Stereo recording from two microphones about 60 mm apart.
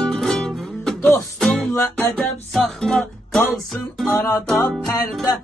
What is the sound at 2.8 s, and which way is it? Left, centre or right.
Music, centre.